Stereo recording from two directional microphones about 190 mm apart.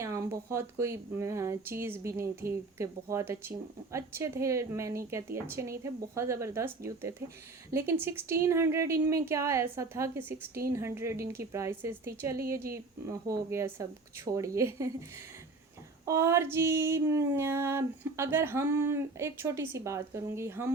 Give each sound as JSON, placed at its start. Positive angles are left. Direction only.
{"t": 0.0, "sound": "female singing", "side_deg": -15}
{"t": 16.0, "sound": "female singing", "side_deg": -15}